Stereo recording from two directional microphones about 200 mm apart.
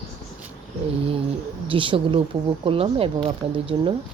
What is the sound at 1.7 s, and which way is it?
Speech, 25° right (ahead or behind).